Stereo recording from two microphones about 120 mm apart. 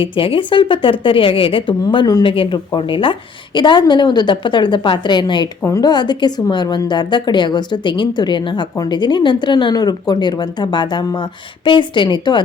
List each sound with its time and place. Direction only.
0.0 s a woman's voice: 45° left (ahead or behind)
2.2 s a woman's voice: 45° left (ahead or behind)
5.6 s a woman's voice: 25° left (ahead or behind)
5.9 s a woman's voice: 40° left (ahead or behind)